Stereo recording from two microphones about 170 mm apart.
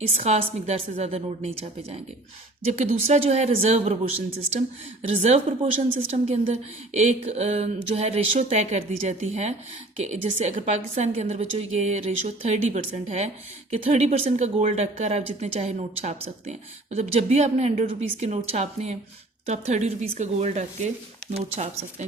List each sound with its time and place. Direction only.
0.1 s a woman's voice: 40° right (ahead or behind)
2.6 s a woman's voice: 40° right (ahead or behind)
5.1 s a woman's voice: 35° right (ahead or behind)